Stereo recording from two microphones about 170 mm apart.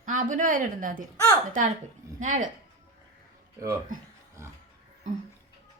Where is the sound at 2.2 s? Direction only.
45° right (ahead or behind).